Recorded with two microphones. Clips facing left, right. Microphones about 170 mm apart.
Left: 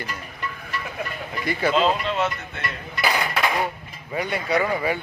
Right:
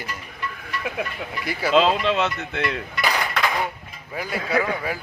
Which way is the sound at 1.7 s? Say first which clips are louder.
Right 6 dB; 90° right.